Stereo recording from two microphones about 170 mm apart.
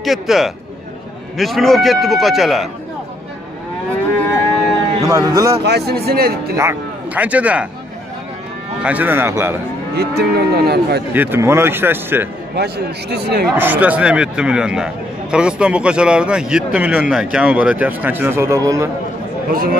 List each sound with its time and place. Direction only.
0.0 s a man's voice: centre (ahead or behind)
5.0 s a man's voice: 20° right (ahead or behind)
5.6 s speech: 75° right (ahead or behind)
6.5 s speech: 15° right (ahead or behind)
8.8 s speech: 10° right (ahead or behind)
9.9 s speech: 70° right (ahead or behind)
11.1 s speech: 15° right (ahead or behind)
12.5 s speech: 70° right (ahead or behind)
13.6 s a man's voice: 10° right (ahead or behind)
19.5 s speech: 60° right (ahead or behind)